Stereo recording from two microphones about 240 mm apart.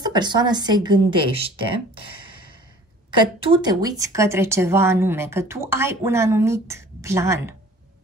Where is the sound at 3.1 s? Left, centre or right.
Right.